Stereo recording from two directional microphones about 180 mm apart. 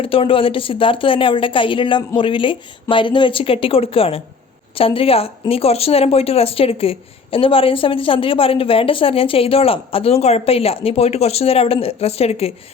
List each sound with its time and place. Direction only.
0.0 s a woman's voice: 30° left (ahead or behind)